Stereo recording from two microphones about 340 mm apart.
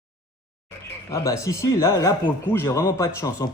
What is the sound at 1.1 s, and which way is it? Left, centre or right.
Speech, centre.